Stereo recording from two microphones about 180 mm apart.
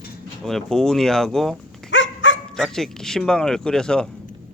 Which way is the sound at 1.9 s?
90° left.